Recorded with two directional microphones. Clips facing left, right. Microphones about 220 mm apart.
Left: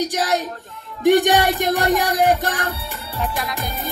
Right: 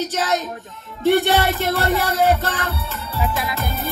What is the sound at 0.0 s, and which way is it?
Music, 15° left (ahead or behind).